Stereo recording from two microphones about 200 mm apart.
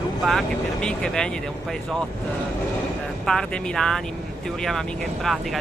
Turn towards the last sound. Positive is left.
turn(degrees=0)  # may be behind; listen again after turning